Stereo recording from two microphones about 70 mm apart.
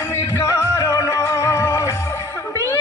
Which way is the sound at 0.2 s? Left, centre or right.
Left.